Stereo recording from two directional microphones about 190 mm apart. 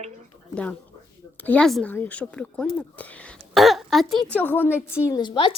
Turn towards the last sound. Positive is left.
turn(degrees=25)  # may be behind; listen again after turning